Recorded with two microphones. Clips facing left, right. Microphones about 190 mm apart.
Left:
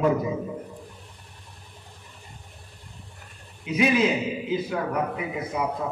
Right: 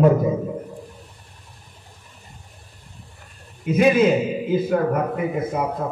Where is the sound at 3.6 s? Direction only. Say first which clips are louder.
Right 6 dB; 50° right (ahead or behind).